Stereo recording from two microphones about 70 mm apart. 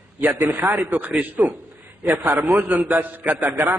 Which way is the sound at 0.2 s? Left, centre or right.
Right.